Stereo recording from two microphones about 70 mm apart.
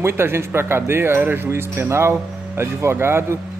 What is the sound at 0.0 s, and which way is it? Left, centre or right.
Speech, right.